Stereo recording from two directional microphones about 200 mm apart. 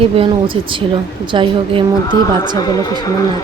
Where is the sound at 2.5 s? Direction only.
20° left (ahead or behind).